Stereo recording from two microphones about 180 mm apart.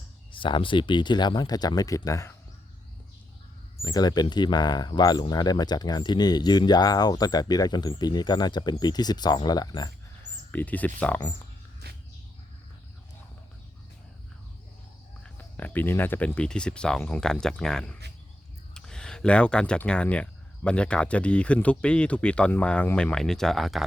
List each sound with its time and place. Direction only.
0.3 s speech: 30° left (ahead or behind)
3.8 s speech: 20° left (ahead or behind)
10.5 s speech: 10° left (ahead or behind)
15.2 s speech: 10° left (ahead or behind)